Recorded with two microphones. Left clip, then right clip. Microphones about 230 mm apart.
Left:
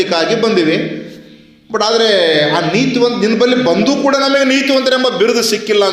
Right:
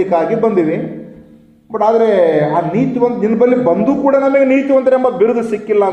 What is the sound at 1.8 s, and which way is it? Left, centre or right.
Speech, left.